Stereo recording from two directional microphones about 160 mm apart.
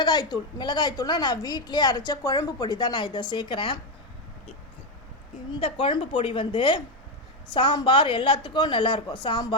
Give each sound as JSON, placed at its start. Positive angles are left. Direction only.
{"t": 0.0, "sound": "a woman's voice", "side_deg": 25}
{"t": 5.5, "sound": "a woman's voice", "side_deg": 35}